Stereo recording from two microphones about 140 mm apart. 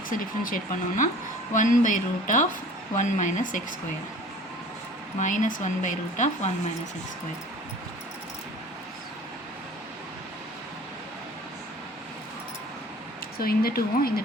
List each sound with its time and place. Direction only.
0.1 s speech: 85° left
1.5 s speech: 65° left (ahead or behind)
5.2 s speech: 65° left (ahead or behind)
13.4 s speech: 90° left